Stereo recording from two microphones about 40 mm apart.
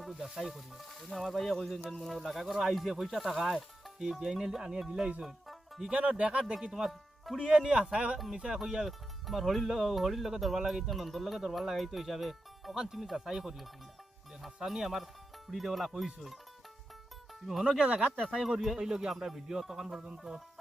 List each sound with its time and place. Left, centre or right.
0.0 s speech: centre
5.2 s music: centre
5.9 s speech: right
6.7 s speech: centre
7.3 s speech: right
8.5 s speech: centre
12.7 s speech: centre
17.4 s speech: centre